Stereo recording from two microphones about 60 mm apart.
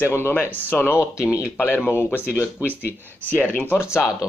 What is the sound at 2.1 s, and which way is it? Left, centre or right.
Speech, left.